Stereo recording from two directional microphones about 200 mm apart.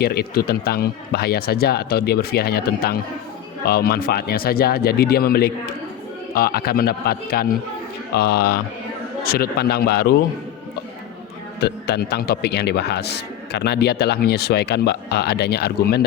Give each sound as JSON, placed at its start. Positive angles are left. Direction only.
{"t": 0.0, "sound": "speech", "side_deg": 50}
{"t": 11.6, "sound": "speech", "side_deg": 55}